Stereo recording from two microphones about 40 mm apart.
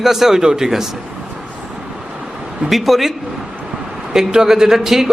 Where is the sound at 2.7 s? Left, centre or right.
Centre.